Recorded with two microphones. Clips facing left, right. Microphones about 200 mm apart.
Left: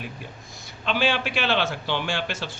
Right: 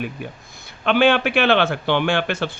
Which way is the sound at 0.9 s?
60° right (ahead or behind).